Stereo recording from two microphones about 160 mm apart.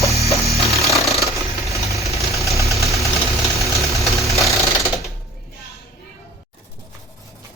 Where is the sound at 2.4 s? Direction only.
20° left (ahead or behind).